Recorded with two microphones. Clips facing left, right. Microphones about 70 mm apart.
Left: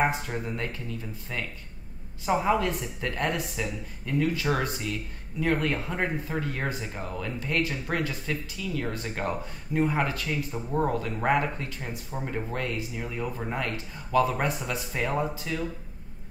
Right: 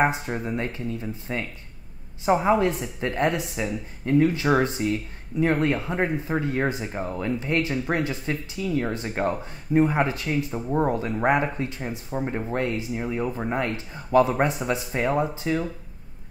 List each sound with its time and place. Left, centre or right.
0.0 s speech: right